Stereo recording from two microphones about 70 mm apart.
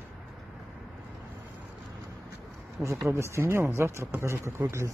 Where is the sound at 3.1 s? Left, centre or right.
Right.